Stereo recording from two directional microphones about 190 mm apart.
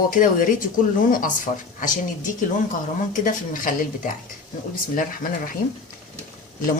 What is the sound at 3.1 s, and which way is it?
Speech, 45° left (ahead or behind).